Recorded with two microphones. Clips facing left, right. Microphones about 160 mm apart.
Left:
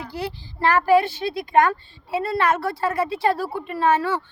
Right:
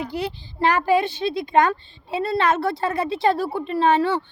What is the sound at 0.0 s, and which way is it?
A woman's voice, 20° right (ahead or behind).